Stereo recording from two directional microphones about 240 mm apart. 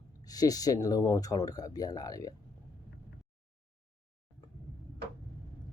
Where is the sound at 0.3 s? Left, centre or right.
Centre.